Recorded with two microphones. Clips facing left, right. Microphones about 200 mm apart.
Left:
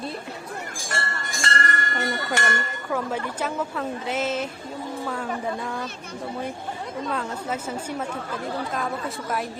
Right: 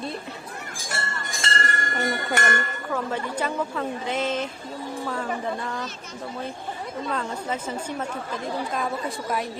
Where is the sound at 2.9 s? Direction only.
5° left (ahead or behind).